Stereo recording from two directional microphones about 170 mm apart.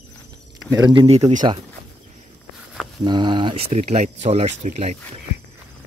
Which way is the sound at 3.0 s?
25° right (ahead or behind).